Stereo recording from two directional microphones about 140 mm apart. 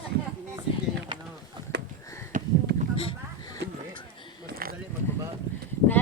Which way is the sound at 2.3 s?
65° right (ahead or behind).